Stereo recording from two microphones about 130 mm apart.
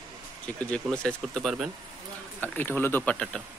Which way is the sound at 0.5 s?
10° left (ahead or behind).